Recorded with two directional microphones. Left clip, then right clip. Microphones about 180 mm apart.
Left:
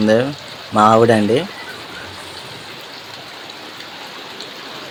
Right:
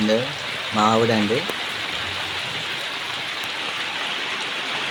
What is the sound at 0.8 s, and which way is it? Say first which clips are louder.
Speech: left 8 dB; 30° left (ahead or behind).